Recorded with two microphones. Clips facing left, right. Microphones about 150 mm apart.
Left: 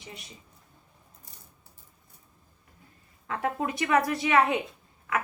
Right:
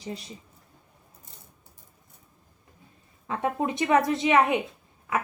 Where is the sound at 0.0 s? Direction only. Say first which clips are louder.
Right 9 dB; 30° right (ahead or behind).